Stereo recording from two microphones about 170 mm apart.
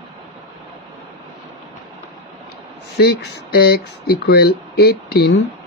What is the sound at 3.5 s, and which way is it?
Speech, 65° left (ahead or behind).